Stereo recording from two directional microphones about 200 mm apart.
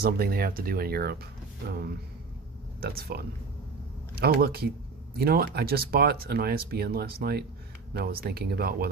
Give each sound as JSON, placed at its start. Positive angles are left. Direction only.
{"t": 0.0, "sound": "speech", "side_deg": -50}